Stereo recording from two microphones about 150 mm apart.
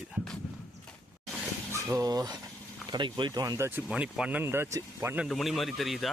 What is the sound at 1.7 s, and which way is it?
Speech, 20° right (ahead or behind).